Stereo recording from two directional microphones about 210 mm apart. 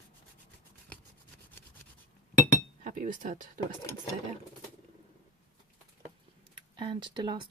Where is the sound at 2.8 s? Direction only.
40° right (ahead or behind).